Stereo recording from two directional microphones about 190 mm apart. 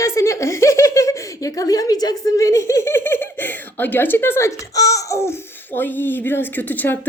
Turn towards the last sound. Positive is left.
turn(degrees=10)  # may be behind; listen again after turning